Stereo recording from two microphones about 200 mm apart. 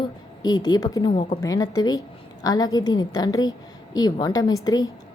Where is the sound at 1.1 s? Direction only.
30° left (ahead or behind).